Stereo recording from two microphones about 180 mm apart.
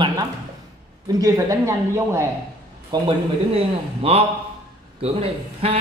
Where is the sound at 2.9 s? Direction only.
25° right (ahead or behind).